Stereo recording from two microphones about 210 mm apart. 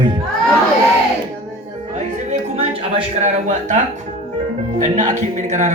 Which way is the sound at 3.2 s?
35° right (ahead or behind).